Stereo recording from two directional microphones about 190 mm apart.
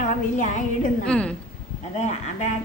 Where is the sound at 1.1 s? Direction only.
5° left (ahead or behind).